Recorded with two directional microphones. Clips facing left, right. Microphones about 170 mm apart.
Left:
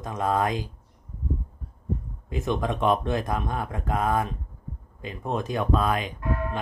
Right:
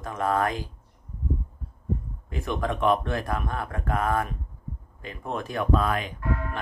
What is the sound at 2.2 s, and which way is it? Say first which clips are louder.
Speech: left 2 dB; 20° left (ahead or behind).